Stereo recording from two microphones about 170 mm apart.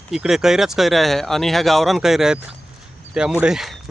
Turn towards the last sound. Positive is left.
turn(degrees=-5)  # may be behind; listen again after turning